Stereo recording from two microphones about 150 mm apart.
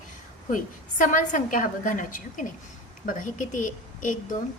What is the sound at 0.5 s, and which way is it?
A woman's voice, 60° left (ahead or behind).